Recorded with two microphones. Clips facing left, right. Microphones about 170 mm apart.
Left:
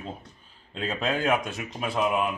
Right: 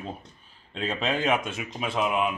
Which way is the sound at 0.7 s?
5° left (ahead or behind).